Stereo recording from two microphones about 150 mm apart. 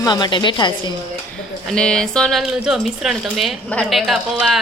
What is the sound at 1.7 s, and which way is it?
Speech, 5° left (ahead or behind).